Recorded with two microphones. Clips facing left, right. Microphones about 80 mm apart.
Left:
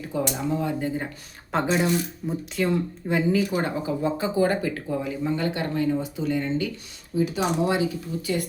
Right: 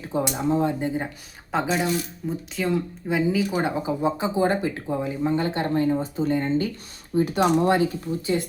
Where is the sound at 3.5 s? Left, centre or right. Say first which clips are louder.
Right 1 dB; centre; by 6.6 s right.